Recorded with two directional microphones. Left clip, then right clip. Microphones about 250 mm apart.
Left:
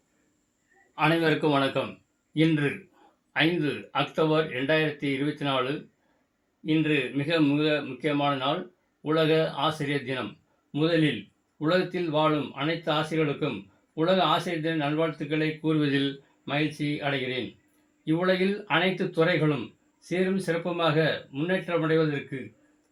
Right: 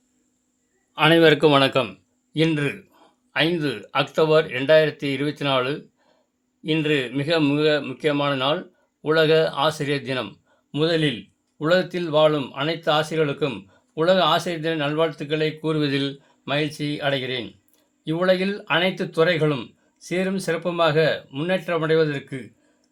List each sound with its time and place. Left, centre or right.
0.9 s speech: right
2.3 s speech: right
6.6 s speech: right